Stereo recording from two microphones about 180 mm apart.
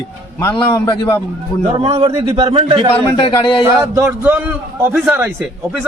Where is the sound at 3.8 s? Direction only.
15° right (ahead or behind).